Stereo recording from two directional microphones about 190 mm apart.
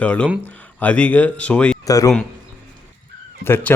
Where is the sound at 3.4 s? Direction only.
10° left (ahead or behind).